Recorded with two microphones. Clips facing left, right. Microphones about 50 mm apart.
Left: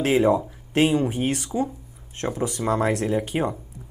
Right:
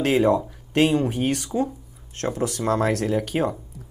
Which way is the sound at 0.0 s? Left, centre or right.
Centre.